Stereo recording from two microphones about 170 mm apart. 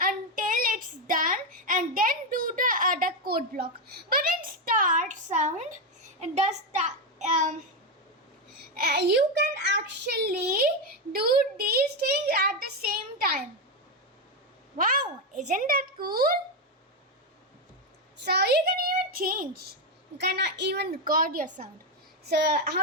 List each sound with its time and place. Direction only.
0.0 s child singing: 55° right (ahead or behind)
8.7 s a woman's voice: 65° right (ahead or behind)
14.8 s speech: 55° right (ahead or behind)
18.2 s a child's voice: 75° right (ahead or behind); by 19.5 s 55° right (ahead or behind)
20.1 s speech: 85° right; by 21.7 s 50° right (ahead or behind)
22.3 s a child's voice: 70° right (ahead or behind)